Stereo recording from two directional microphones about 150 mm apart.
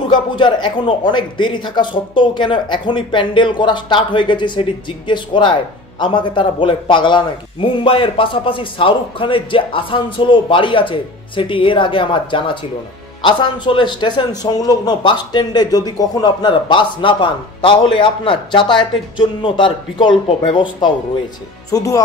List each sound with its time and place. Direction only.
0.1 s speech: 30° left (ahead or behind)